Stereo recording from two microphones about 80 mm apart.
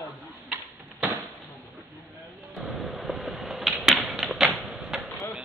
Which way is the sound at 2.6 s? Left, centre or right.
Centre.